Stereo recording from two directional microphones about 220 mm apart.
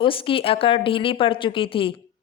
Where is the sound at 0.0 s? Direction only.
25° left (ahead or behind).